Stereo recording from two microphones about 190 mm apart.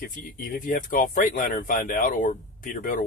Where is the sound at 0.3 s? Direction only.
50° left (ahead or behind).